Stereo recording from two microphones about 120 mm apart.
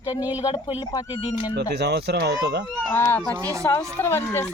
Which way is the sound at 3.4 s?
30° right (ahead or behind).